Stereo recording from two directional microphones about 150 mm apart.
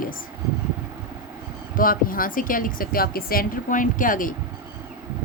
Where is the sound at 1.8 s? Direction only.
70° left (ahead or behind).